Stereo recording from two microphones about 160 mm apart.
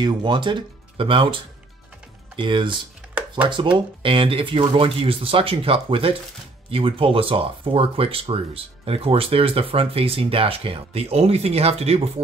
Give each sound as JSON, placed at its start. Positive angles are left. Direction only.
{"t": 0.0, "sound": "speech", "side_deg": -30}